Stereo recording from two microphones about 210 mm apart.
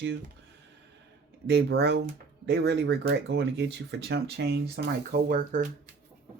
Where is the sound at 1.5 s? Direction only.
55° right (ahead or behind); by 5.7 s 40° right (ahead or behind).